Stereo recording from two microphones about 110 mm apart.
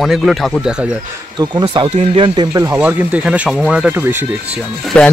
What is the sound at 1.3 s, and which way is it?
Speech, 45° right (ahead or behind).